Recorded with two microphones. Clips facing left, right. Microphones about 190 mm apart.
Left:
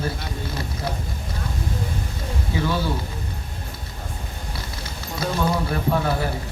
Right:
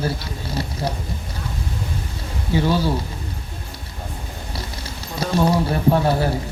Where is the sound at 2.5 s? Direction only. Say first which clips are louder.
Right 5 dB; 30° right (ahead or behind).